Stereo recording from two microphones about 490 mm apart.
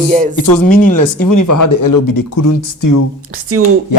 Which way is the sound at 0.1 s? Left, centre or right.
Centre.